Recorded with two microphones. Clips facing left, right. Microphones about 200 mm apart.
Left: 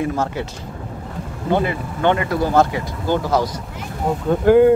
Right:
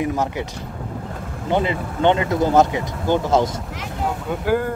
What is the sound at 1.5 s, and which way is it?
Speech, 20° right (ahead or behind).